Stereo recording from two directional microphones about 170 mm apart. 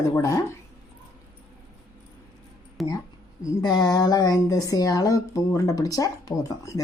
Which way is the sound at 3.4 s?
25° left (ahead or behind).